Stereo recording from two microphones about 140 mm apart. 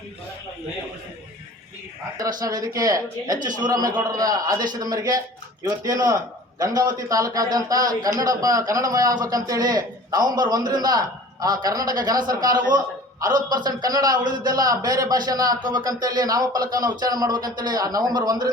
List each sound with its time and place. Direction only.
2.1 s a man's voice: 25° right (ahead or behind)